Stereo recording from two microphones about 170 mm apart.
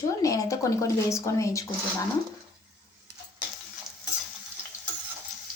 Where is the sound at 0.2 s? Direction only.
20° left (ahead or behind).